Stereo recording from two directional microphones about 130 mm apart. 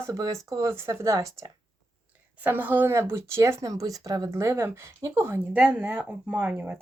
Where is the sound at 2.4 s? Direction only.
15° right (ahead or behind).